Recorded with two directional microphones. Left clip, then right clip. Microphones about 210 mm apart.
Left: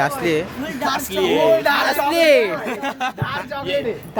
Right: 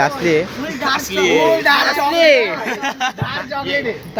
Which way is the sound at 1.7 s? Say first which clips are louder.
Right 3 dB; 50° left (ahead or behind).